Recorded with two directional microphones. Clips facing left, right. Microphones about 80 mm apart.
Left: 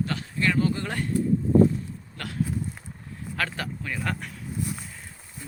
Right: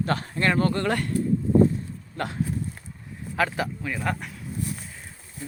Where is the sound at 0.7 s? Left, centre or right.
Right.